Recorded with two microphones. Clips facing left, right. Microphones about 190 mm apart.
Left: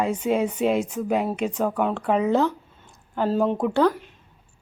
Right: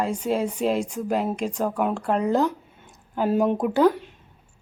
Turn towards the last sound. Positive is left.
turn(degrees=-5)  # may be behind; listen again after turning